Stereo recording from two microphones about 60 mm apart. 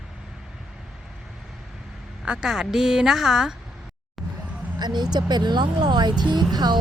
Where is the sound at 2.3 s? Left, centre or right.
Centre.